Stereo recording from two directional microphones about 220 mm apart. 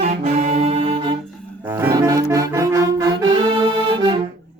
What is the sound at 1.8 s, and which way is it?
Brass instrument, 15° right (ahead or behind).